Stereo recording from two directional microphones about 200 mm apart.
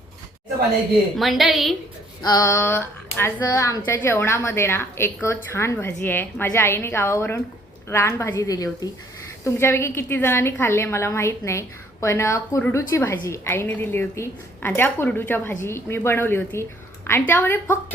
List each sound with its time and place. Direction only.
1.1 s a woman's voice: centre (ahead or behind)
2.2 s a woman's voice: 15° left (ahead or behind)